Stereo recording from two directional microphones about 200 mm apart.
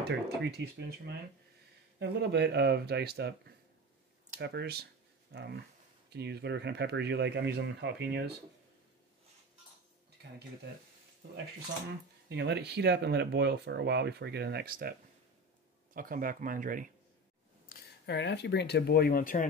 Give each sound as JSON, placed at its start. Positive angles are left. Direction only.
{"t": 0.0, "sound": "speech", "side_deg": -55}
{"t": 12.3, "sound": "speech", "side_deg": -55}
{"t": 17.6, "sound": "speech", "side_deg": 50}